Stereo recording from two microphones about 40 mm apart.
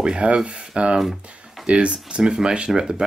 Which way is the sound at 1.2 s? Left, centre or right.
Right.